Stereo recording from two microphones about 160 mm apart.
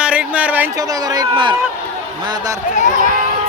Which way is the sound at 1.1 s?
25° right (ahead or behind).